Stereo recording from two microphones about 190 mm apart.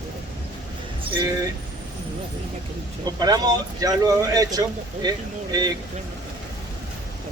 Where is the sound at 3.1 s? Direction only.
20° right (ahead or behind).